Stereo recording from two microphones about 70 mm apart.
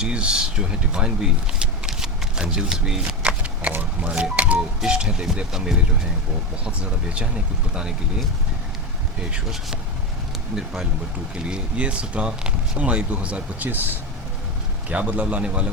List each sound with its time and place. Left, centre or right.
0.0 s speech: centre
3.1 s a sound: centre
4.8 s speech: centre
6.7 s speech: centre
9.3 s speech: centre
11.4 s speech: centre
14.8 s a man's voice: centre